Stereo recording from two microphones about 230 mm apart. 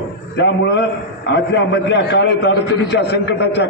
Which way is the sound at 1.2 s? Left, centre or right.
Left.